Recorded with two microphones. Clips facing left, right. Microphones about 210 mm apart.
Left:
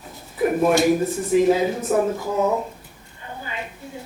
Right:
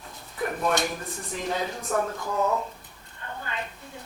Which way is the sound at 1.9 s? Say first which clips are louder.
Left 5 dB; 20° left (ahead or behind).